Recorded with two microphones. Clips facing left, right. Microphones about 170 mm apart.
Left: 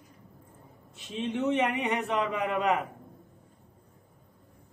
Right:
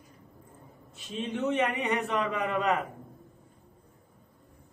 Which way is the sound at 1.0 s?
20° left (ahead or behind).